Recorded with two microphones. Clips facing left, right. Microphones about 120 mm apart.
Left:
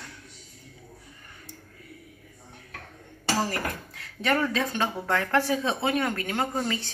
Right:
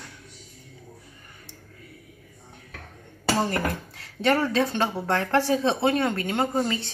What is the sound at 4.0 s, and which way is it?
A woman's voice, 30° right (ahead or behind).